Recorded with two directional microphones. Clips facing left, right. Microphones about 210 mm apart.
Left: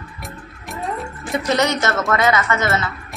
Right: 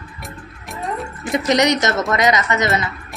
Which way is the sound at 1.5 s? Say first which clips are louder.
Right 3 dB; 15° right (ahead or behind).